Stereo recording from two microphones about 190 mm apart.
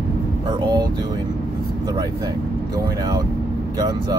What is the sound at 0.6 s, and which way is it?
Speech, 20° right (ahead or behind).